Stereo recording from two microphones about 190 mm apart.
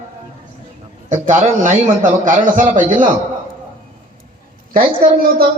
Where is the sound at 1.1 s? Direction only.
40° right (ahead or behind).